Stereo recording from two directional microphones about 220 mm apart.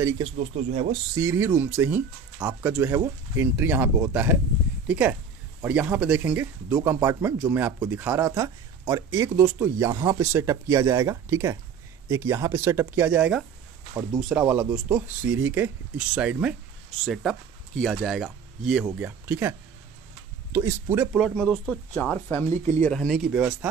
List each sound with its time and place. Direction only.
0.2 s speech: 30° right (ahead or behind)
1.2 s speech: 10° right (ahead or behind)
20.5 s speech: 10° right (ahead or behind)